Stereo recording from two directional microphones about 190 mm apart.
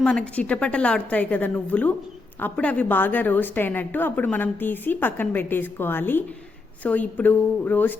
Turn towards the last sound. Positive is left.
turn(degrees=10)  # may be behind; listen again after turning